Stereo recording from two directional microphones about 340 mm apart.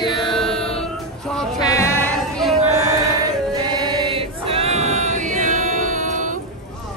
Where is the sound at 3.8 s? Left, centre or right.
Centre.